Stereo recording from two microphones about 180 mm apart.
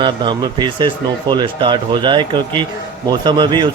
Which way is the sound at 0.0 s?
25° right (ahead or behind).